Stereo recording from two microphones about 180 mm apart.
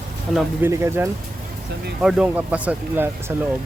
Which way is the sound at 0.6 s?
15° right (ahead or behind).